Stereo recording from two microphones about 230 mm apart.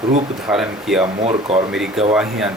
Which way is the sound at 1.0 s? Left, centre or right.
Right.